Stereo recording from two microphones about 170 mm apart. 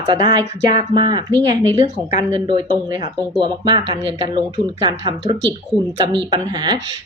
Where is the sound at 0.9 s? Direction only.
25° right (ahead or behind).